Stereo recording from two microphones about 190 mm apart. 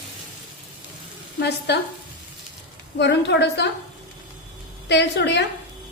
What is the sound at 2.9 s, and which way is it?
Speech, 65° left (ahead or behind).